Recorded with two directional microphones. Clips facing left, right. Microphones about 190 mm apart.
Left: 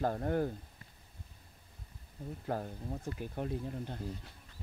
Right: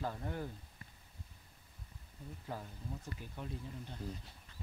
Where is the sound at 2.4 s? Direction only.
55° left (ahead or behind).